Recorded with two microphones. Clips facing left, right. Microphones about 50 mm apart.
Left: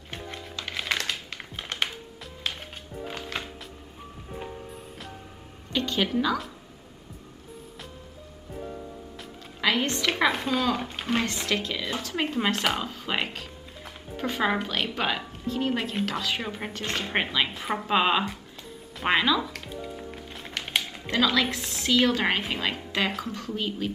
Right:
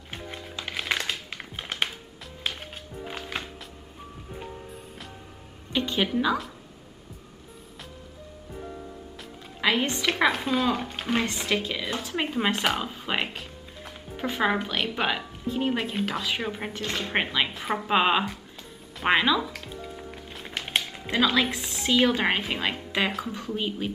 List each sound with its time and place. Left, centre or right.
0.1 s music: centre
5.7 s a woman's voice: centre
9.6 s a woman's voice: centre
15.4 s music: centre
15.7 s a woman's voice: centre
20.3 s music: centre
21.1 s a woman's voice: centre